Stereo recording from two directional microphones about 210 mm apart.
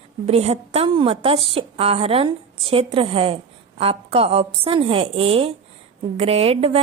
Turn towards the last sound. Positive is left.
turn(degrees=-30)  # may be behind; listen again after turning